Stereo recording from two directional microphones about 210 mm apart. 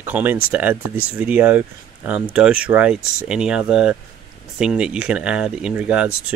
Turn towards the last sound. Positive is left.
turn(degrees=-5)  # may be behind; listen again after turning